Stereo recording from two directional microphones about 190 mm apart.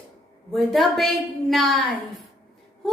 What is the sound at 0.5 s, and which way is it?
A woman's voice, centre (ahead or behind).